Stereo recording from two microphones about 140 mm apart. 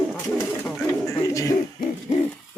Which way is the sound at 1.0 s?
20° left (ahead or behind).